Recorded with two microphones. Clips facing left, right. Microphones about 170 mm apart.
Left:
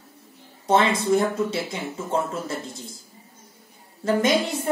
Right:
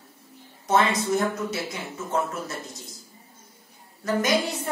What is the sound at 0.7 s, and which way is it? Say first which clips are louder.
A woman's voice: left 3 dB; 25° left (ahead or behind).